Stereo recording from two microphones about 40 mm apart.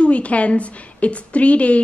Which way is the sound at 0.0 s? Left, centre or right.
Left.